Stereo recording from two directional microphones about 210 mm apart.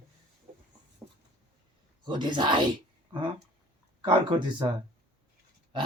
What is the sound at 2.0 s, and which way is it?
Speech, 20° right (ahead or behind).